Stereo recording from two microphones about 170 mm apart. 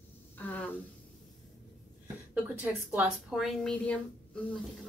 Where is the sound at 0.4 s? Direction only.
10° left (ahead or behind).